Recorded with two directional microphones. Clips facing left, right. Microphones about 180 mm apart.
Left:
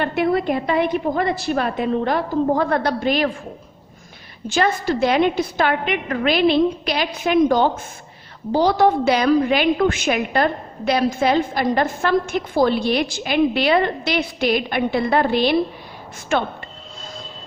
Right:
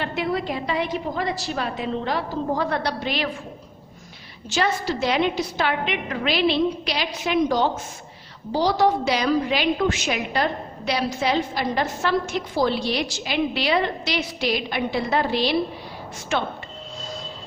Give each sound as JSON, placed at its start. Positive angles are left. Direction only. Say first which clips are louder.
{"t": 0.0, "sound": "a woman's voice", "louder": "left 6 dB", "side_deg": 55}
{"t": 4.4, "sound": "a woman's voice", "louder": "left 4 dB", "side_deg": 50}